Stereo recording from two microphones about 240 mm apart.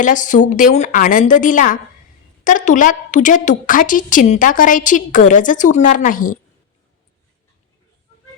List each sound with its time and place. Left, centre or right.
0.0 s a woman's voice: left